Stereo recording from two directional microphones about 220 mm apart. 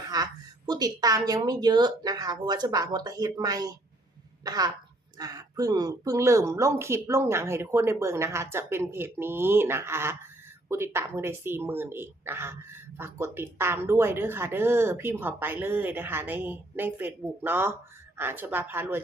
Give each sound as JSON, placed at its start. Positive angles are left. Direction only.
{"t": 0.1, "sound": "speech", "side_deg": -20}